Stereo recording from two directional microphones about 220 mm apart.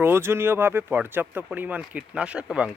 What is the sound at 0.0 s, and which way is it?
Speech, 10° right (ahead or behind).